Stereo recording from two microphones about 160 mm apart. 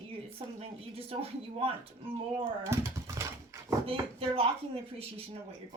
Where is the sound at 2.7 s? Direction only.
20° right (ahead or behind).